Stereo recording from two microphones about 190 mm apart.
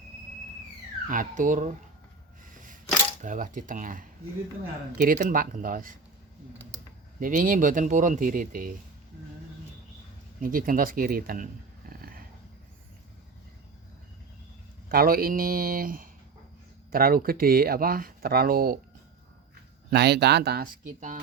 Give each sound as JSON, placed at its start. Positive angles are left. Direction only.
{"t": 1.0, "sound": "speech", "side_deg": -45}
{"t": 2.4, "sound": "camera", "side_deg": -45}
{"t": 3.2, "sound": "speech", "side_deg": -40}
{"t": 7.2, "sound": "speech", "side_deg": -45}
{"t": 10.4, "sound": "speech", "side_deg": -50}
{"t": 11.9, "sound": "dog", "side_deg": -50}
{"t": 14.8, "sound": "speech", "side_deg": -50}
{"t": 19.9, "sound": "speech", "side_deg": -60}